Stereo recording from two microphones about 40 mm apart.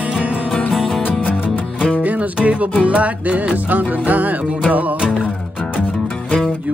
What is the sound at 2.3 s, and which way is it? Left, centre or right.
Music, right.